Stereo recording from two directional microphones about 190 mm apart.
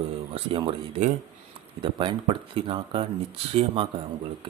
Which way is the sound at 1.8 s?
25° right (ahead or behind).